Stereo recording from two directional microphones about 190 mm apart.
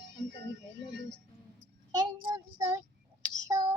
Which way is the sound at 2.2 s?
20° right (ahead or behind).